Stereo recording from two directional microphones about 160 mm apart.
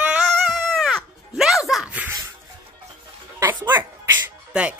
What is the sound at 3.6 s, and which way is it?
Music, 15° right (ahead or behind).